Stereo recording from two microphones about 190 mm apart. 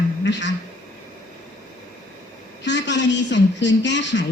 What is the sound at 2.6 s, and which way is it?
A woman's voice, 65° left (ahead or behind).